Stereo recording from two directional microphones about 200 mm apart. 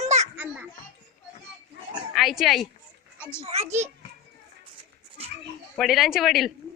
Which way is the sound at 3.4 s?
30° right (ahead or behind).